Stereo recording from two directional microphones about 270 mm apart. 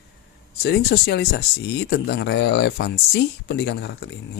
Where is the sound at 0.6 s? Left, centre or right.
Left.